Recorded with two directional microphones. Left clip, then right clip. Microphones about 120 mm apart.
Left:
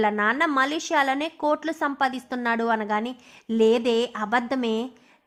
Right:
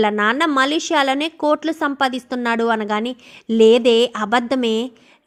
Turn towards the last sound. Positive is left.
turn(degrees=-25)  # may be behind; listen again after turning